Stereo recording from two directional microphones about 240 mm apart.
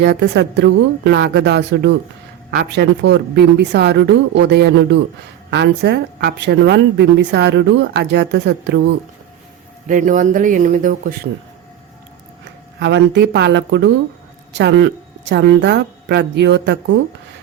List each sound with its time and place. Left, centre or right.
0.0 s a woman's voice: right
9.8 s speech: right
12.8 s a woman's voice: right